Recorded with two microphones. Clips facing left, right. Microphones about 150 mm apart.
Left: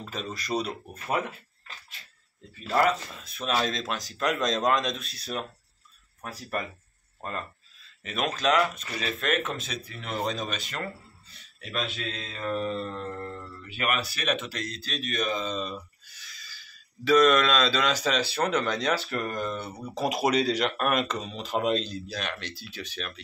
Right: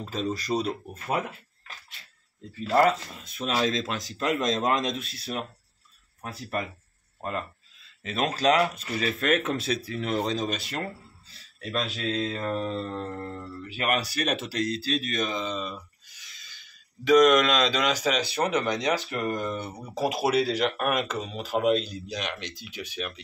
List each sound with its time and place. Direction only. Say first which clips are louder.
0.0 s speech: right 6 dB; 35° right (ahead or behind)
2.7 s speech: right 3 dB; 30° right (ahead or behind)
6.5 s speech: right 1 dB; 20° right (ahead or behind)
8.0 s speech: right 3 dB; 30° right (ahead or behind)
15.5 s speech: left 1 dB; 10° right (ahead or behind)